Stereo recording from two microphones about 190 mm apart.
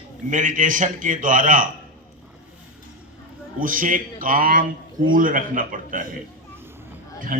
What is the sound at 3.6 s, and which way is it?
A man's voice, 45° right (ahead or behind).